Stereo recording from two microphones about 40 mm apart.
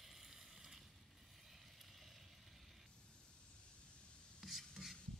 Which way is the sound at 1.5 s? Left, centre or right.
Centre.